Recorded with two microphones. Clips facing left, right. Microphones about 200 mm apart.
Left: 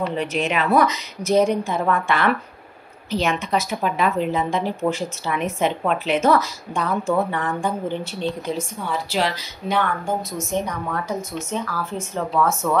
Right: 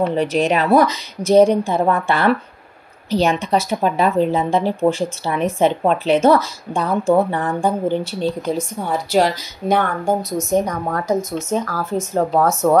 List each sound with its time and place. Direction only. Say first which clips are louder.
0.1 s speech: right 6 dB; 35° right (ahead or behind)